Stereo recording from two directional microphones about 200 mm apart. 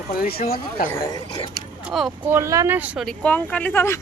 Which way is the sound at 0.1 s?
50° left (ahead or behind).